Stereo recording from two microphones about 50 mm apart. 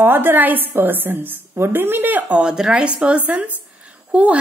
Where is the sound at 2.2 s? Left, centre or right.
Right.